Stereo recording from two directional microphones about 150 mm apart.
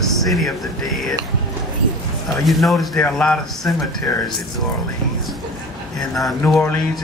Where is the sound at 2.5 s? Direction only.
Centre (ahead or behind).